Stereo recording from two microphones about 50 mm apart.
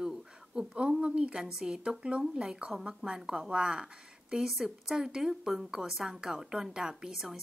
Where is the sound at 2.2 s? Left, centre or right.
Centre.